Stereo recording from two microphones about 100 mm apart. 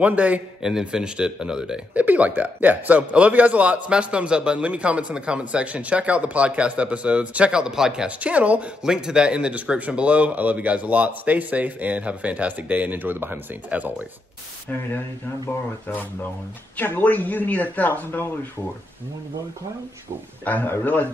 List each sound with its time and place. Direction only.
0.0 s a man's voice: 15° right (ahead or behind)
14.7 s speech: 20° left (ahead or behind)
16.7 s speech: 15° left (ahead or behind)
20.4 s speech: 20° left (ahead or behind)